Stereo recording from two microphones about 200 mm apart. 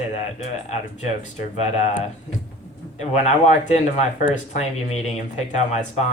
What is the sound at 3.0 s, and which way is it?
Speech, 35° left (ahead or behind).